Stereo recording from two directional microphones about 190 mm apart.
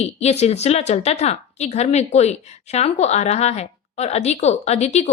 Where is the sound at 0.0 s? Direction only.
35° left (ahead or behind).